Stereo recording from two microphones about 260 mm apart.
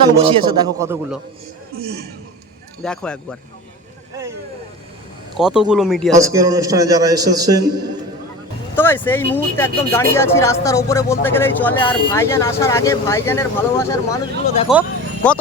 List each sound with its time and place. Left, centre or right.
0.2 s a man's voice: centre
1.8 s a man's voice: right
2.8 s speech: centre
5.4 s speech: centre
6.1 s a man's voice: centre
8.7 s speech: centre
14.7 s a sound: centre